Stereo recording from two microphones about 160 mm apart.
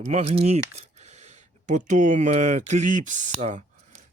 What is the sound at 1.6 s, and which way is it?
Speech, 50° right (ahead or behind).